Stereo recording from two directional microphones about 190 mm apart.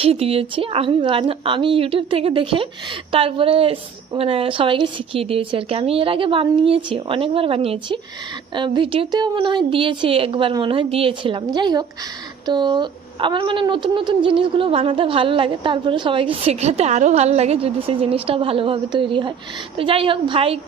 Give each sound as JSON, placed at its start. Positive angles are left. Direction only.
{"t": 0.0, "sound": "a woman's voice", "side_deg": -30}